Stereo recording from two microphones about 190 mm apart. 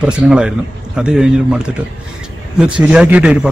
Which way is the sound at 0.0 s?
5° right (ahead or behind).